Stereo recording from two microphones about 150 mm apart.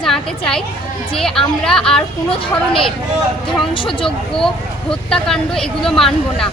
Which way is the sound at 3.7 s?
35° left (ahead or behind).